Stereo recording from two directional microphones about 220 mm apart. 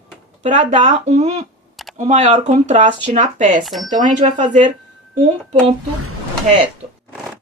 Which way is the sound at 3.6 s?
Centre (ahead or behind).